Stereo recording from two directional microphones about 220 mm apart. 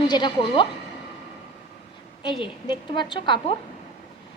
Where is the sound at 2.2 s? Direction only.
20° left (ahead or behind).